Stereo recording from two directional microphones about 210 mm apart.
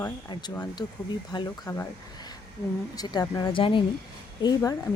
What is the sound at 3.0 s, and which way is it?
Speech, 20° left (ahead or behind).